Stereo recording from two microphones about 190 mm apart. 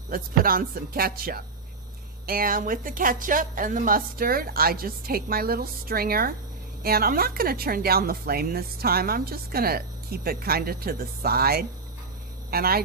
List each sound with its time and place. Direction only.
0.1 s speech: 50° right (ahead or behind)